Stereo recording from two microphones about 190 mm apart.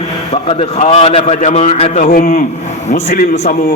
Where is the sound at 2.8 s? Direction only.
35° left (ahead or behind).